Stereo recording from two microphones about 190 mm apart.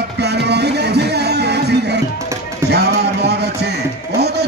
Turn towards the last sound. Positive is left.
turn(degrees=-60)  # may be behind; listen again after turning